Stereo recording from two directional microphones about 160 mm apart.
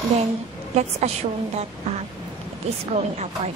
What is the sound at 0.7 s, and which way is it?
Speech, 45° right (ahead or behind).